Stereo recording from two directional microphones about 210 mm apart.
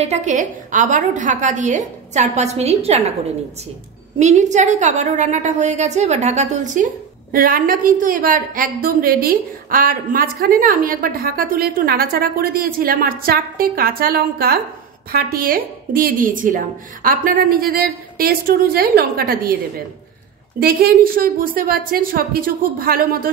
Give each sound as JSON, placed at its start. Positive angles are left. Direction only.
{"t": 0.0, "sound": "a woman's voice", "side_deg": -35}
{"t": 4.2, "sound": "a woman's voice", "side_deg": -35}
{"t": 20.5, "sound": "a woman's voice", "side_deg": -45}